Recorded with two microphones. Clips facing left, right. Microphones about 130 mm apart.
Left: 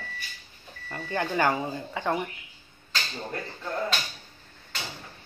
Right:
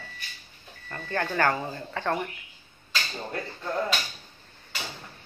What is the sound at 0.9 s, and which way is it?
Speech, 10° left (ahead or behind).